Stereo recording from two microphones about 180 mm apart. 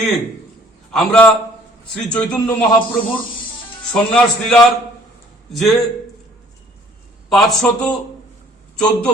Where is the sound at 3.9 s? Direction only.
5° left (ahead or behind).